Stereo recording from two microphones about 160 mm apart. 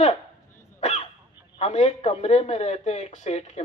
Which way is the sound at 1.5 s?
45° left (ahead or behind).